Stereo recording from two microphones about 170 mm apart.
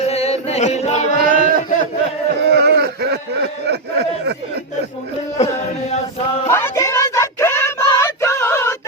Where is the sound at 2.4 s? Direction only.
85° right.